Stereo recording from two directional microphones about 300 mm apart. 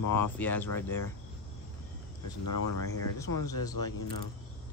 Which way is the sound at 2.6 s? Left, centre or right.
Left.